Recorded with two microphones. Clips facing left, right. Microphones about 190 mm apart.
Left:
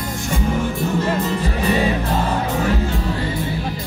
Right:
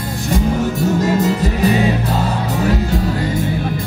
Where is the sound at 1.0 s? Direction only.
40° right (ahead or behind).